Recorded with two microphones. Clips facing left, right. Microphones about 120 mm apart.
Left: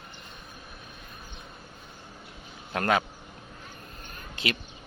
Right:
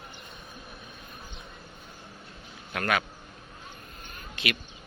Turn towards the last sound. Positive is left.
turn(degrees=30)  # may be behind; listen again after turning